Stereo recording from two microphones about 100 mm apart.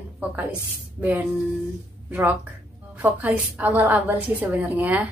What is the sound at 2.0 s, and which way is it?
A woman's voice, 20° right (ahead or behind).